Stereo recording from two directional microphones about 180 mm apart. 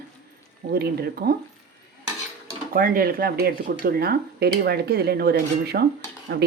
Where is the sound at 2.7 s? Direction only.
55° right (ahead or behind); by 6.5 s 70° right (ahead or behind).